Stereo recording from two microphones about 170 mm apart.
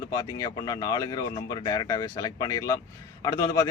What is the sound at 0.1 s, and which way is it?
Speech, 20° left (ahead or behind).